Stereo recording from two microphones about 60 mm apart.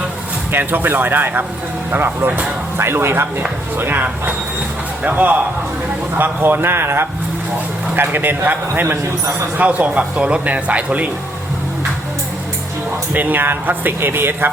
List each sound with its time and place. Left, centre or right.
0.5 s speech: right
2.7 s speech: right
9.6 s speech: right
13.1 s speech: right